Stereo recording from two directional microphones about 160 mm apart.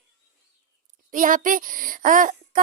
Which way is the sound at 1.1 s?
55° right (ahead or behind).